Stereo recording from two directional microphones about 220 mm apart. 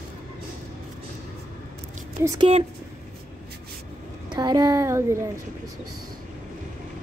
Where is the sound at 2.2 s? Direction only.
15° right (ahead or behind).